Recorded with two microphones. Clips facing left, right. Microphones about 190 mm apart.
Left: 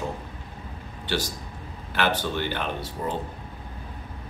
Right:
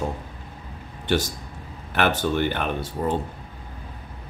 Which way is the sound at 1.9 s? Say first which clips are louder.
Right 4 dB; 50° right (ahead or behind).